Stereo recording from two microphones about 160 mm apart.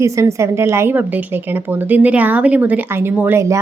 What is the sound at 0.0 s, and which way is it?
A woman's voice, 20° right (ahead or behind).